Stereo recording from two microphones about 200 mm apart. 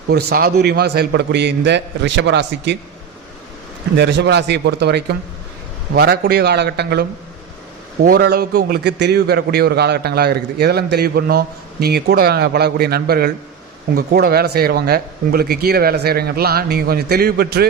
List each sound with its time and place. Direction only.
0.1 s a man's voice: 55° right (ahead or behind)
3.9 s a man's voice: 60° right (ahead or behind)